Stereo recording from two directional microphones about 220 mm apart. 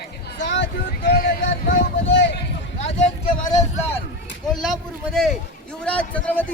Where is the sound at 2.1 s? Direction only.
55° left (ahead or behind).